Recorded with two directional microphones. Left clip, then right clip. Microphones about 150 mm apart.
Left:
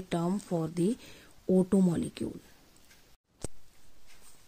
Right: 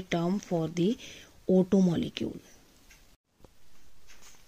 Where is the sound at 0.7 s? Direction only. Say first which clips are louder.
Right 2 dB; 35° left (ahead or behind).